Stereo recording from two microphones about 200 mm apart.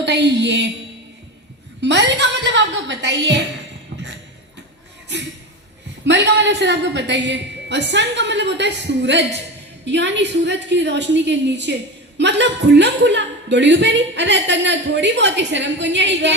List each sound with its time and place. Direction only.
0.0 s a woman's voice: 60° right (ahead or behind)
1.8 s a woman's voice: 60° right (ahead or behind)
6.1 s a woman's voice: 60° right (ahead or behind)